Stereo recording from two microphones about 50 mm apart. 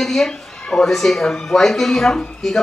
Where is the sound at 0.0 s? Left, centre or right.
Centre.